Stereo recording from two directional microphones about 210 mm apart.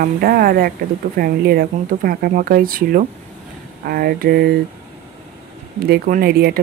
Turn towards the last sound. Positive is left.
turn(degrees=-45)  # may be behind; listen again after turning